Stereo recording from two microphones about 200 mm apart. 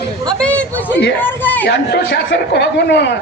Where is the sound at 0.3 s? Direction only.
5° left (ahead or behind).